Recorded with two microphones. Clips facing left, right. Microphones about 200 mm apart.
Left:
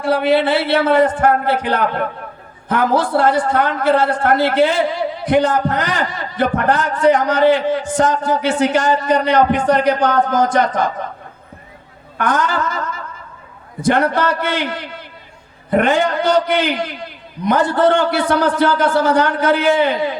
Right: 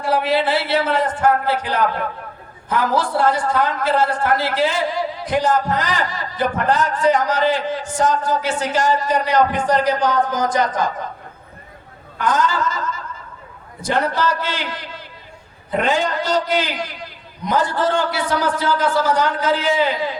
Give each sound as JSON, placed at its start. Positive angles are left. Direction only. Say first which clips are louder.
{"t": 0.0, "sound": "a man's voice", "louder": "left 4 dB", "side_deg": 60}
{"t": 12.1, "sound": "a man's voice", "louder": "left 1 dB", "side_deg": 60}
{"t": 13.8, "sound": "a man's voice", "louder": "left 4 dB", "side_deg": 60}